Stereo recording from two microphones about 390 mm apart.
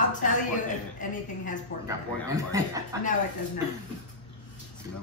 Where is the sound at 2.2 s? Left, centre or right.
Centre.